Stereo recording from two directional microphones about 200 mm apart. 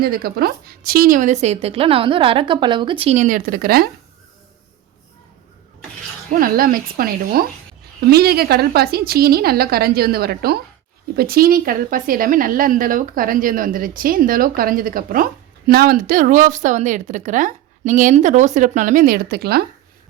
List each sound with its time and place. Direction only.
0.0 s speech: 50° right (ahead or behind)
6.4 s a woman's voice: 45° right (ahead or behind)